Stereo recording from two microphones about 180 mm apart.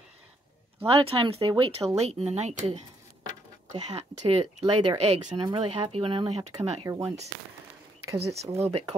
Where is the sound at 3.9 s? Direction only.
35° right (ahead or behind).